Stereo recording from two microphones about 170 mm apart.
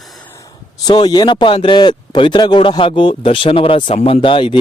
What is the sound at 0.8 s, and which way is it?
Speech, 25° left (ahead or behind).